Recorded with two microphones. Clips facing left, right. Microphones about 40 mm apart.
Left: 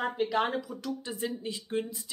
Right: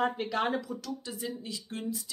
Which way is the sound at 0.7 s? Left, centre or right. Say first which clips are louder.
Left 3 dB; left.